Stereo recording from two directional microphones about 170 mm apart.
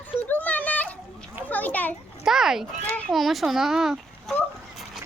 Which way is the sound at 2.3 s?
Centre (ahead or behind).